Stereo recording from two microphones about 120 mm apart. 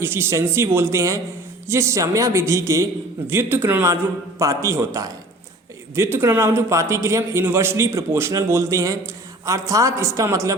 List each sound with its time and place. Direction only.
0.0 s a man's voice: 20° right (ahead or behind)